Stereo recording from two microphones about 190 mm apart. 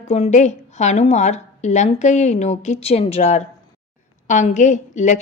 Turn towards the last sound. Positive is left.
turn(degrees=40)  # may be behind; listen again after turning